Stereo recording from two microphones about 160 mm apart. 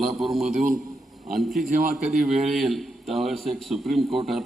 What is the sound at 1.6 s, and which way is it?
Speech, 60° right (ahead or behind).